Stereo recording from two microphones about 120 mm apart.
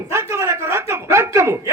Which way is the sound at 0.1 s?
25° right (ahead or behind).